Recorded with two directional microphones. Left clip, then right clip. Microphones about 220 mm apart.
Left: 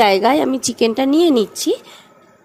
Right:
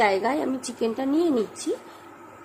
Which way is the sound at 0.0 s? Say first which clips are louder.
Left 9 dB; 40° left (ahead or behind).